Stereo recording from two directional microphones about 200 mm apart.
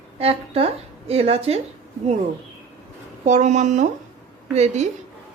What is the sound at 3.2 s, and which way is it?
A woman's voice, 35° right (ahead or behind).